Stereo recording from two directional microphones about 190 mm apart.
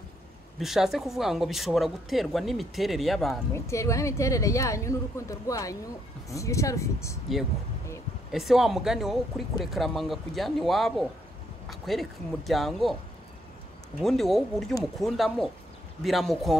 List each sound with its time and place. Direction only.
0.6 s speech: centre (ahead or behind)
3.5 s a woman's voice: 15° left (ahead or behind)
8.3 s speech: centre (ahead or behind)
13.9 s speech: centre (ahead or behind)